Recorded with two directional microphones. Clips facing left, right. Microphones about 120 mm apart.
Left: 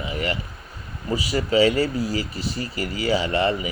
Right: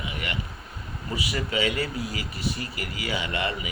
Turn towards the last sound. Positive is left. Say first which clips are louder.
# left 8 dB
turn(degrees=35)  # may be behind; listen again after turning